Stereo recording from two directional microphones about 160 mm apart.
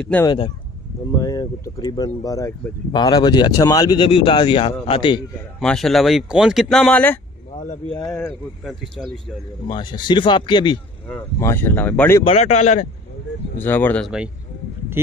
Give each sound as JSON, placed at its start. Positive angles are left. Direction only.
{"t": 0.0, "sound": "speech", "side_deg": 10}
{"t": 1.2, "sound": "a man's voice", "side_deg": 20}
{"t": 5.6, "sound": "speech", "side_deg": 0}
{"t": 8.6, "sound": "speech", "side_deg": 0}
{"t": 9.7, "sound": "speech", "side_deg": 30}
{"t": 11.1, "sound": "speech", "side_deg": 15}
{"t": 12.2, "sound": "speech", "side_deg": 40}
{"t": 13.6, "sound": "speech", "side_deg": 10}
{"t": 14.0, "sound": "speech", "side_deg": -5}